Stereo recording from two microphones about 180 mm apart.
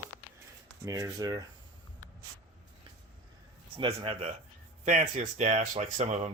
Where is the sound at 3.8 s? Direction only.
30° right (ahead or behind).